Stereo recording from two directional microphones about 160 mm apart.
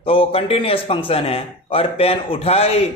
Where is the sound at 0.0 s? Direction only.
35° left (ahead or behind).